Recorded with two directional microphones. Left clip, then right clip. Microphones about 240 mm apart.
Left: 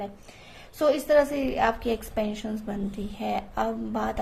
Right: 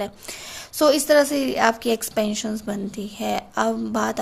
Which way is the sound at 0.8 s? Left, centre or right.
Right.